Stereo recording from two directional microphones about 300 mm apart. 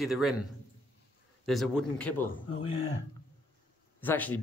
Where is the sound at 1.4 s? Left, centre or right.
Centre.